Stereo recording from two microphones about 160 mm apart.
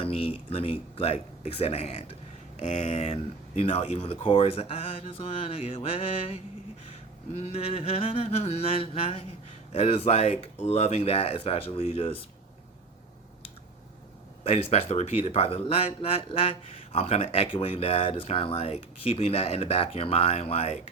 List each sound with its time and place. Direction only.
0.0 s speech: 35° left (ahead or behind)
14.4 s speech: 40° left (ahead or behind)